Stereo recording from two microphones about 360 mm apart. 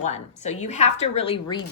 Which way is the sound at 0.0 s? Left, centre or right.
Centre.